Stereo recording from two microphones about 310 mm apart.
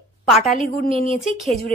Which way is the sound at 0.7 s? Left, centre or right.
Left.